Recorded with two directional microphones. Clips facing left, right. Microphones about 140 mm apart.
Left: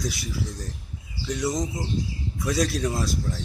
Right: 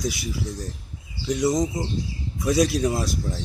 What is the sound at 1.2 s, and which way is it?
Speech, 20° right (ahead or behind).